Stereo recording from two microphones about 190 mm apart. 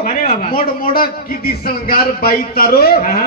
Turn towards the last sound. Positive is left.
turn(degrees=50)  # may be behind; listen again after turning